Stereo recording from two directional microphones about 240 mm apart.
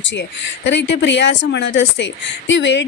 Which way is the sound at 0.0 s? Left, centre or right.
Left.